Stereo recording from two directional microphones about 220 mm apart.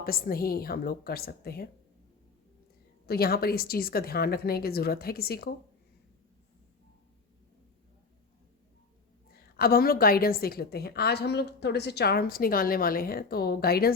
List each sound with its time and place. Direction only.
0.0 s a woman's voice: 40° left (ahead or behind)
3.1 s a woman's voice: 45° left (ahead or behind)
9.3 s a woman's voice: 45° left (ahead or behind)